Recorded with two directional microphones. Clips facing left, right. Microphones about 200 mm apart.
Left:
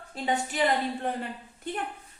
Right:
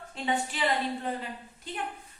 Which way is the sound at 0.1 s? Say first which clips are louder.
Left 1 dB; 45° left (ahead or behind).